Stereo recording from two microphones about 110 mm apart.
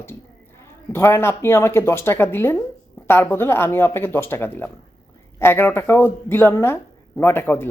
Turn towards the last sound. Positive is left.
turn(degrees=20)  # may be behind; listen again after turning